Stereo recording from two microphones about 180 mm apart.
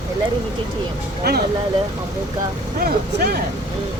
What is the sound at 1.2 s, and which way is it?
Speech, 60° right (ahead or behind).